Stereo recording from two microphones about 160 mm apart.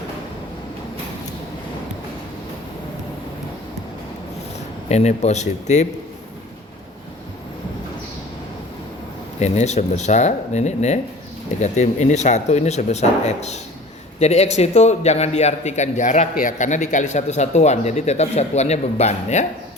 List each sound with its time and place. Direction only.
4.9 s speech: 45° left (ahead or behind)
9.4 s speech: 45° left (ahead or behind)